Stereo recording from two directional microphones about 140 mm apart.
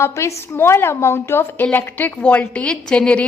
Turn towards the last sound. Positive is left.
turn(degrees=5)  # may be behind; listen again after turning